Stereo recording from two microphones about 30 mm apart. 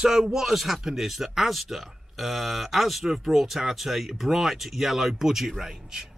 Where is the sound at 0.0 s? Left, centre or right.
Centre.